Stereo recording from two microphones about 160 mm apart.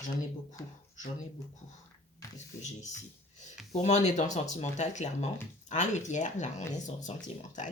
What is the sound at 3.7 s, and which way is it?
Speech, 45° left (ahead or behind).